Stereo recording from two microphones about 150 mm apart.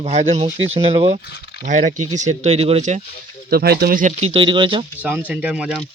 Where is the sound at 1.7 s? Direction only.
55° right (ahead or behind).